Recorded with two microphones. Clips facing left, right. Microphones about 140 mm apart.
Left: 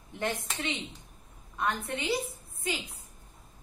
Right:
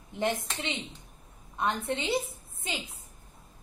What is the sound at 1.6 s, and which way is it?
A woman's voice, 25° right (ahead or behind).